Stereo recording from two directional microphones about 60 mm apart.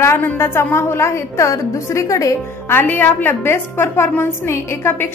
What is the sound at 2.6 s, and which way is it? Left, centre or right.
A woman's voice, left.